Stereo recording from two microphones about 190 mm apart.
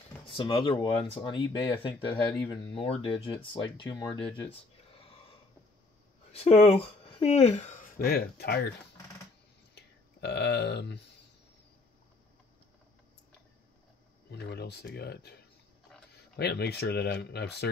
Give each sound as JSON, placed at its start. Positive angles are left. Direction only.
{"t": 0.3, "sound": "speech", "side_deg": 25}
{"t": 4.4, "sound": "a sound", "side_deg": 30}
{"t": 6.3, "sound": "speech", "side_deg": 30}
{"t": 9.8, "sound": "a sound", "side_deg": 60}
{"t": 14.3, "sound": "speech", "side_deg": 60}
{"t": 16.3, "sound": "speech", "side_deg": 60}